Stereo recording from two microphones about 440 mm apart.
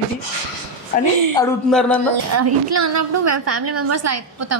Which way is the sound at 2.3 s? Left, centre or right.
Right.